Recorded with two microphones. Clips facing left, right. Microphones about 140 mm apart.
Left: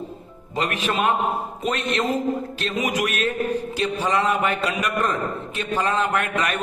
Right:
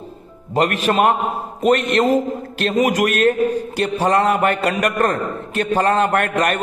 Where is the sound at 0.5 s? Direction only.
60° right (ahead or behind).